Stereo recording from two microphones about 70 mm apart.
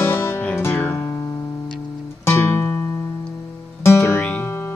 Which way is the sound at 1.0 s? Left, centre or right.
Left.